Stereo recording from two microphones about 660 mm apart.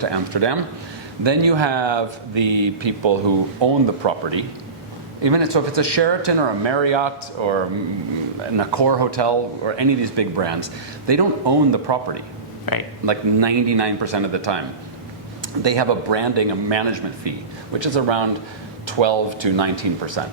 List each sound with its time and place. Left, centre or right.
0.0 s speech: right
15.6 s speech: right